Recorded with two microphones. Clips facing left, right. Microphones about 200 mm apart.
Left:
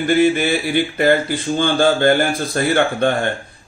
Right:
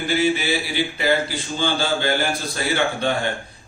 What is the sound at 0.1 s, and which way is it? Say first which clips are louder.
A man's voice: left 6 dB; 55° left (ahead or behind).